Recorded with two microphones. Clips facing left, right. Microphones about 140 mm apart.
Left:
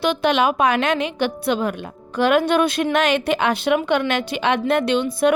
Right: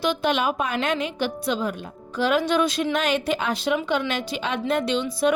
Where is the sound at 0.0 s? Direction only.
70° left (ahead or behind).